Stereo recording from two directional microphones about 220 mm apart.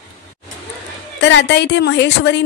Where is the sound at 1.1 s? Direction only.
50° left (ahead or behind).